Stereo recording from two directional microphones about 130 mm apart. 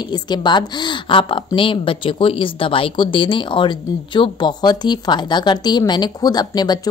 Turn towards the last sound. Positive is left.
turn(degrees=30)  # may be behind; listen again after turning